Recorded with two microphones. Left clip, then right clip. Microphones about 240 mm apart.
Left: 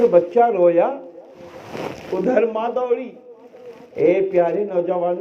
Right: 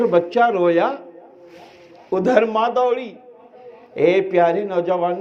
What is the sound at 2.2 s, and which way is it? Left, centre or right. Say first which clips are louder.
A man's voice: right 2 dB; right.